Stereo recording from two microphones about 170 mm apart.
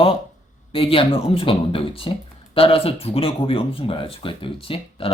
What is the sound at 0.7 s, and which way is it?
Speech, 30° left (ahead or behind).